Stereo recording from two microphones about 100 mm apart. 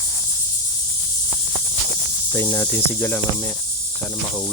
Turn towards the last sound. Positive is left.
turn(degrees=25)  # may be behind; listen again after turning